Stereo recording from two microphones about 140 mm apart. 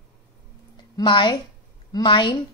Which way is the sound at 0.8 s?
35° left (ahead or behind).